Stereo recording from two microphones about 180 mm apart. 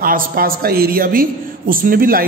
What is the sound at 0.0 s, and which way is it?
A man's voice, 50° right (ahead or behind).